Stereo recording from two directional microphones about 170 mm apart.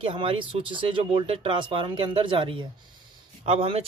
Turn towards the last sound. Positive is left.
turn(degrees=-35)  # may be behind; listen again after turning